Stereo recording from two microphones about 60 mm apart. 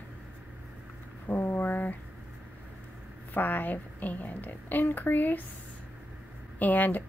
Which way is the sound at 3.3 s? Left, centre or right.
Left.